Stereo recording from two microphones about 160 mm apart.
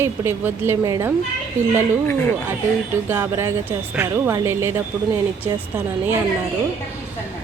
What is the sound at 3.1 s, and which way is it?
A woman's voice, 15° right (ahead or behind).